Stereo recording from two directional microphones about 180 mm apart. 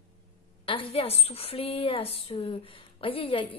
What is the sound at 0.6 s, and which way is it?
A woman's voice, 30° left (ahead or behind).